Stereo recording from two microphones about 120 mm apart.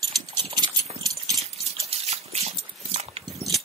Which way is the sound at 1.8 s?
60° right (ahead or behind).